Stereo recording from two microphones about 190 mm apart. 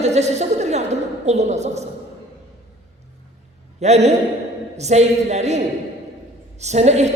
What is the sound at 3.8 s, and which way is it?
A woman's voice, 35° right (ahead or behind).